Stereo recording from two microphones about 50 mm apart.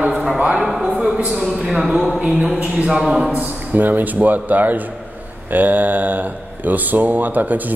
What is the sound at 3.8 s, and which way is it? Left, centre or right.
Speech, right.